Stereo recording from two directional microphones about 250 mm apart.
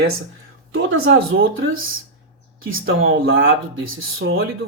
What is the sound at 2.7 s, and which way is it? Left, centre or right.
Speech, right.